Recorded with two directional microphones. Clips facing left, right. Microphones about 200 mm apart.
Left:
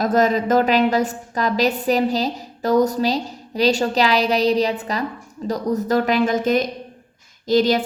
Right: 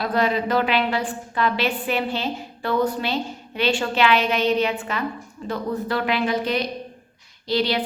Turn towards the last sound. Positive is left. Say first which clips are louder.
# left 6 dB
turn(degrees=45)  # may be behind; listen again after turning